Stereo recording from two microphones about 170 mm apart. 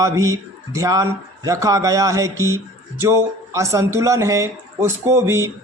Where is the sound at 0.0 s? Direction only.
20° right (ahead or behind).